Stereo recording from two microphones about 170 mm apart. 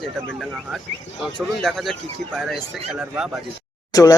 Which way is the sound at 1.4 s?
5° left (ahead or behind).